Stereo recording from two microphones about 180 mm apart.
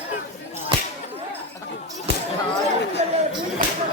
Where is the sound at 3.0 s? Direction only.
40° right (ahead or behind).